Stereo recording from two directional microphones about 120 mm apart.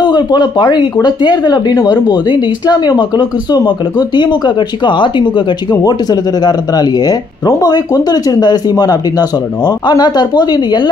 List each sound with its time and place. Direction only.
0.0 s speech: 35° left (ahead or behind)